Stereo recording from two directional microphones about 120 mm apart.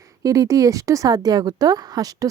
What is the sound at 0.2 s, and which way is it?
Speech, 30° right (ahead or behind).